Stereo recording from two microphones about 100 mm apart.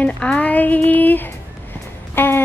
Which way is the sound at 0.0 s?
15° left (ahead or behind).